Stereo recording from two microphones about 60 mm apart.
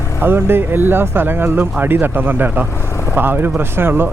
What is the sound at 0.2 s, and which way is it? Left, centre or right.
Speech, right.